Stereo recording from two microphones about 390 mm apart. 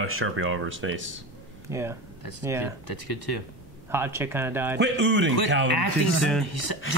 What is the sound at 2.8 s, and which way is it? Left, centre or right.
Speech, left.